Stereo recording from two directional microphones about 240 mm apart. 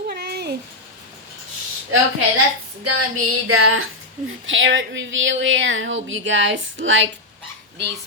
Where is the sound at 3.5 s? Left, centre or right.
Right.